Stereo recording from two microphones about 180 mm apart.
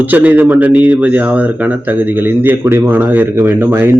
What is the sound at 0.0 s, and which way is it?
A man's voice, 10° right (ahead or behind).